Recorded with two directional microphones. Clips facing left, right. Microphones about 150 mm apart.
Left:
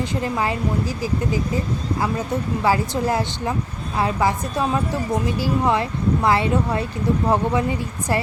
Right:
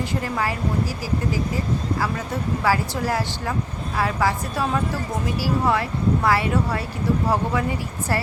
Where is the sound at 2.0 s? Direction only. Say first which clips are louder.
Left 3 dB; 20° left (ahead or behind).